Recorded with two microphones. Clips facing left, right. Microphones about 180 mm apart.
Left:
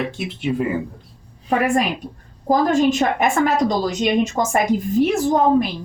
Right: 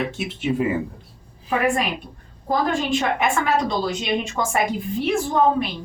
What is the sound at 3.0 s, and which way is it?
A woman's voice, 45° left (ahead or behind).